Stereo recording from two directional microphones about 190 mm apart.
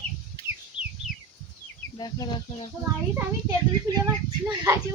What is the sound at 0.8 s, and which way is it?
Bird, 25° left (ahead or behind).